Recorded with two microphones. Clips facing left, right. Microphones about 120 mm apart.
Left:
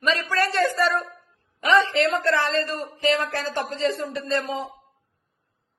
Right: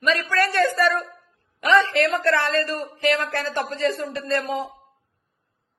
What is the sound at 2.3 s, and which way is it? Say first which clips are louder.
Speech: right 1 dB; 70° right (ahead or behind).